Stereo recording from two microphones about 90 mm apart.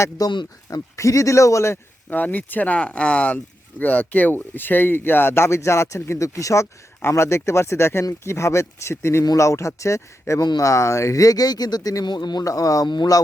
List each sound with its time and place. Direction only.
0.2 s speech: 45° left (ahead or behind)
12.0 s speech: 55° left (ahead or behind)